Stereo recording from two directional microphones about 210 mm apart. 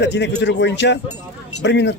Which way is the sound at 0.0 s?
55° left (ahead or behind).